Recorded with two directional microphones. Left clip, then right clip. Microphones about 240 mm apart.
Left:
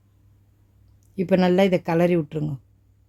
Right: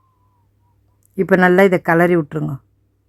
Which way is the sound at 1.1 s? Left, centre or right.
Centre.